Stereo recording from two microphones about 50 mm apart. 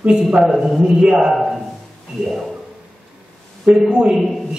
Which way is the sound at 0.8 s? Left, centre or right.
Centre.